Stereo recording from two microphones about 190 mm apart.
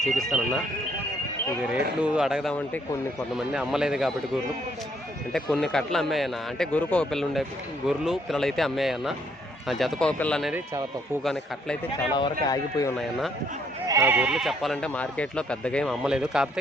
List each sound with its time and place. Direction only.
0.1 s speech: centre (ahead or behind)
2.0 s speech: 5° right (ahead or behind)
5.3 s speech: centre (ahead or behind)
12.1 s speech: 20° left (ahead or behind)
13.0 s speech: centre (ahead or behind)
13.8 s speech: 15° right (ahead or behind)